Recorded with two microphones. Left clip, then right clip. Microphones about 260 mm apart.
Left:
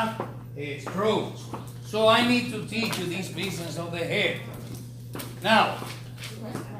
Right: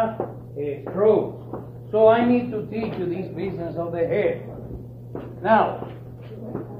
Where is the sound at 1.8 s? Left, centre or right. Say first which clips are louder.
Right 6 dB; left.